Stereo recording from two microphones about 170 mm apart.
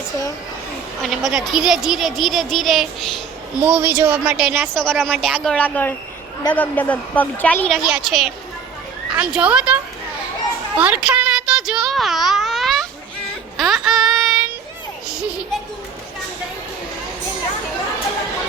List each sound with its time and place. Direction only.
1.0 s a woman's voice: centre (ahead or behind)
3.6 s speech: 10° right (ahead or behind)
4.6 s a woman's voice: 5° left (ahead or behind)
7.9 s a woman's voice: 5° right (ahead or behind)
10.8 s a sound: 10° right (ahead or behind)
13.6 s child singing: centre (ahead or behind)